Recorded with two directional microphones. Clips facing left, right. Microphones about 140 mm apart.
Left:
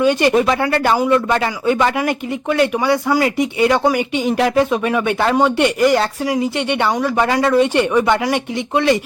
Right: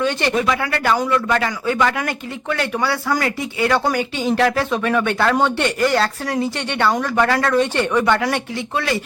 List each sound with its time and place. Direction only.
0.0 s speech: 15° left (ahead or behind)
0.3 s speech: 30° left (ahead or behind)